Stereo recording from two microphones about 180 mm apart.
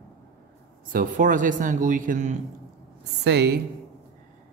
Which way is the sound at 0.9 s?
45° right (ahead or behind).